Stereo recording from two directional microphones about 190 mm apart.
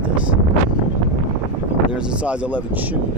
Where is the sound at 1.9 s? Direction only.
5° right (ahead or behind).